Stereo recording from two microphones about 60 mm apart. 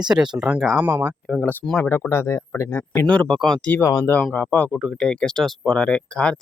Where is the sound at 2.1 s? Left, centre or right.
Left.